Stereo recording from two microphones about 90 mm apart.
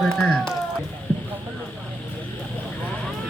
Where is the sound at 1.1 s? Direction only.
20° left (ahead or behind).